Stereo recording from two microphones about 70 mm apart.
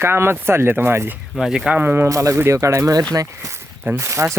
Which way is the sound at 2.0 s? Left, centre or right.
Right.